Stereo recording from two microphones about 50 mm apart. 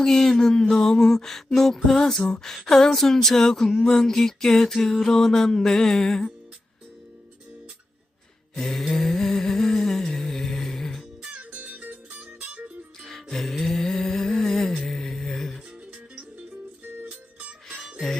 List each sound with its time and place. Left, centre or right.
0.0 s a sound: centre
8.5 s humming: centre
11.3 s music: right
13.3 s music: centre